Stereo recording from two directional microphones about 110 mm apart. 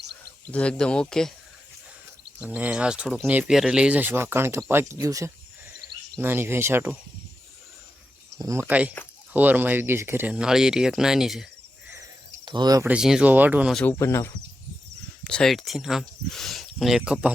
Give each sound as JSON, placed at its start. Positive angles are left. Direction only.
{"t": 0.5, "sound": "speech", "side_deg": 10}
{"t": 2.4, "sound": "speech", "side_deg": -10}
{"t": 8.4, "sound": "speech", "side_deg": -30}
{"t": 8.6, "sound": "speech", "side_deg": -15}
{"t": 10.3, "sound": "speech", "side_deg": -5}
{"t": 12.5, "sound": "speech", "side_deg": -40}
{"t": 12.8, "sound": "speech", "side_deg": -10}
{"t": 13.8, "sound": "speech", "side_deg": 20}
{"t": 15.2, "sound": "speech", "side_deg": 5}